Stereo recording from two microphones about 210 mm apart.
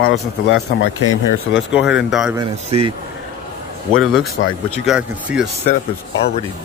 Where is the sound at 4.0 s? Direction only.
Centre (ahead or behind).